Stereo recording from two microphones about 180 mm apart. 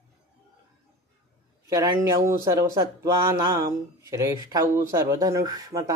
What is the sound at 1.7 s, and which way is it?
Speech, 20° right (ahead or behind).